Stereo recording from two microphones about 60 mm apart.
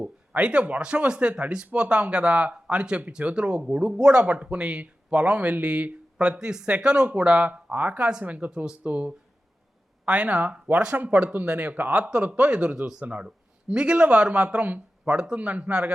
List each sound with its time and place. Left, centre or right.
0.0 s speech: centre
8.4 s speech: centre
8.8 s speech: right
10.5 s speech: centre